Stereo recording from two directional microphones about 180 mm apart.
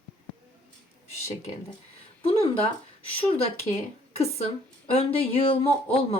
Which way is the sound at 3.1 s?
30° left (ahead or behind).